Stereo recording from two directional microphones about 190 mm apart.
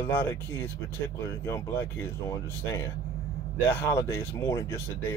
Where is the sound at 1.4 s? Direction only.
15° left (ahead or behind).